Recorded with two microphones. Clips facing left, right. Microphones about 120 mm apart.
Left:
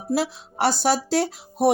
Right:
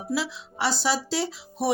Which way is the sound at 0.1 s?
50° left (ahead or behind).